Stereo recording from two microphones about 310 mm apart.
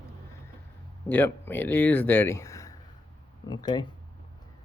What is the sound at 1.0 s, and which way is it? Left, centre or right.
Speech, centre.